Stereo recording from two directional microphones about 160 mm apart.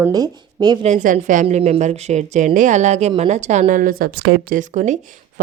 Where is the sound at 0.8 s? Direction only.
50° right (ahead or behind).